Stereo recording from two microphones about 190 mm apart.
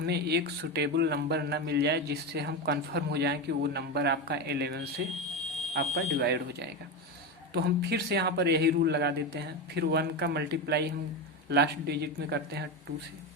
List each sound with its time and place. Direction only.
0.0 s speech: 60° right (ahead or behind)